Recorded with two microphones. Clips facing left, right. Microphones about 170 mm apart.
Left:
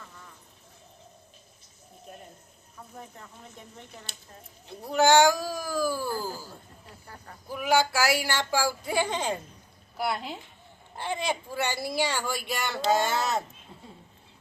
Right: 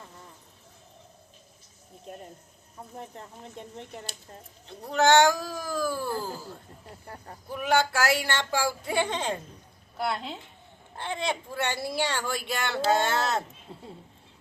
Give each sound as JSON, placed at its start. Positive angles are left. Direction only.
{"t": 2.7, "sound": "speech", "side_deg": -30}
{"t": 4.8, "sound": "speech", "side_deg": 10}
{"t": 7.4, "sound": "speech", "side_deg": 5}
{"t": 13.7, "sound": "a sound", "side_deg": -30}